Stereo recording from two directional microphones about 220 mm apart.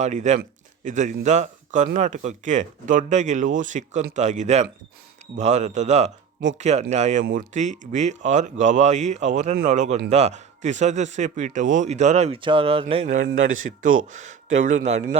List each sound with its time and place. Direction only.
0.0 s speech: 35° right (ahead or behind)
13.2 s a man's voice: 60° right (ahead or behind)
14.2 s speech: 35° right (ahead or behind)